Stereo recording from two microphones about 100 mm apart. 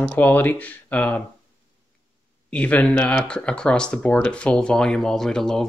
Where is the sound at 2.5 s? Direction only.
15° left (ahead or behind).